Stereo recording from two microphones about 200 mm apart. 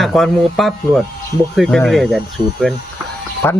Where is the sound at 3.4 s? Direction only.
10° left (ahead or behind).